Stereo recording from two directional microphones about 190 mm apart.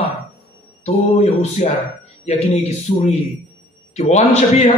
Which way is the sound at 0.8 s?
35° left (ahead or behind).